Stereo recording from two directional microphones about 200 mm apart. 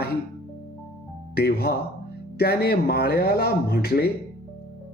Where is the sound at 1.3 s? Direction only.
50° left (ahead or behind).